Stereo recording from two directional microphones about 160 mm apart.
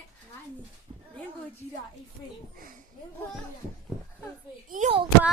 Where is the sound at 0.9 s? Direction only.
30° right (ahead or behind).